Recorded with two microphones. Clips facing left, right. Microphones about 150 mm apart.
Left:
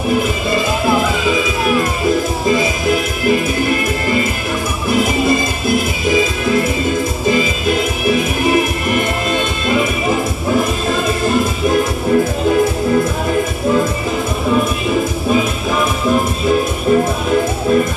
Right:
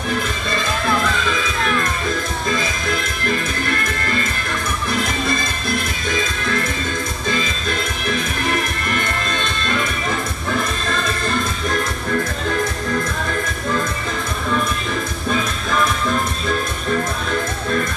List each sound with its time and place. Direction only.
0.1 s music: 10° left (ahead or behind)
16.1 s music: 10° left (ahead or behind)